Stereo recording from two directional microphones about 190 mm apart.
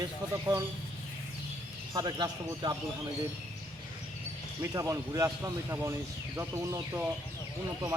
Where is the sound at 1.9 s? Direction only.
20° right (ahead or behind).